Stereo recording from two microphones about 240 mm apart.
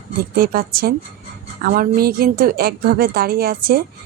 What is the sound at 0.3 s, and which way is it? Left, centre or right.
A woman's voice, right.